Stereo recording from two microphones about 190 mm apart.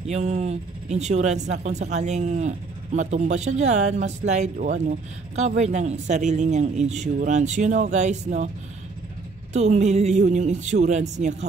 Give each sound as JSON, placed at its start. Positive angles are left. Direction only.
{"t": 0.0, "sound": "speech", "side_deg": -35}
{"t": 9.5, "sound": "speech", "side_deg": -35}